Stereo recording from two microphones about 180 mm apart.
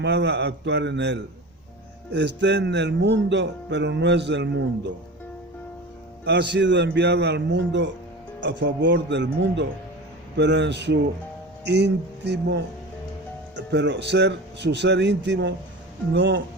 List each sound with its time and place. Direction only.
0.0 s speech: 70° right (ahead or behind)
6.2 s speech: 70° right (ahead or behind)